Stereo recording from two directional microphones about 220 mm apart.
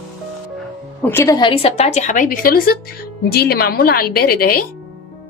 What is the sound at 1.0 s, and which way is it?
A woman's voice, 10° left (ahead or behind).